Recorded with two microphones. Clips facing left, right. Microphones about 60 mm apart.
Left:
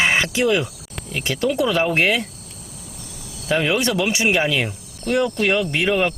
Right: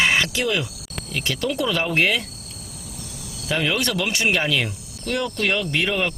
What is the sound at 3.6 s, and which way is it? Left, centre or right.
Cricket, centre.